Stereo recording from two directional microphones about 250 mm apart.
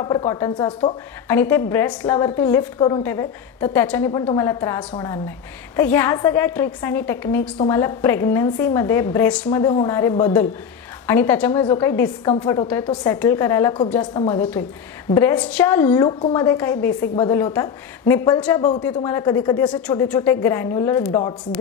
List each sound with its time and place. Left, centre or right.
0.0 s a woman's voice: centre